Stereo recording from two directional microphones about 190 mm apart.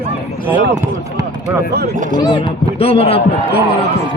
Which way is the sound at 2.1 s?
25° left (ahead or behind).